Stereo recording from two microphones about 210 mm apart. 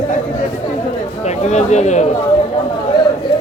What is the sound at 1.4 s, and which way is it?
Speech, 35° left (ahead or behind).